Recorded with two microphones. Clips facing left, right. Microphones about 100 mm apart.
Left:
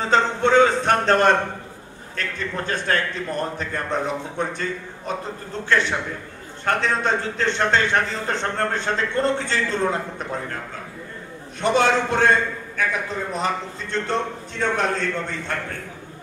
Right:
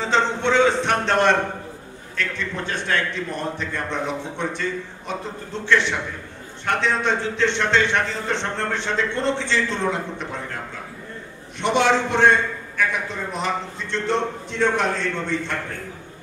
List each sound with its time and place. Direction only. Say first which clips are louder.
0.0 s a sound: left 2 dB; 40° left (ahead or behind)
2.1 s a man's voice: right 1 dB; 40° left (ahead or behind)
11.6 s a man's voice: even; 40° left (ahead or behind)
13.4 s a man's voice: right 2 dB; 40° left (ahead or behind)